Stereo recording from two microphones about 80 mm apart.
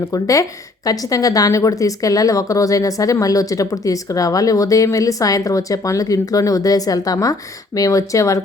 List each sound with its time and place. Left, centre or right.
0.1 s a woman's voice: left